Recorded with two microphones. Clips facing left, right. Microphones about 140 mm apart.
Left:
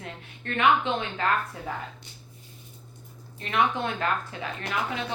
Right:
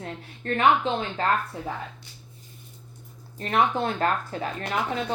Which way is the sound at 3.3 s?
40° right (ahead or behind).